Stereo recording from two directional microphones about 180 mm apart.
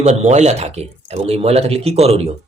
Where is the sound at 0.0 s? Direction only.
40° right (ahead or behind).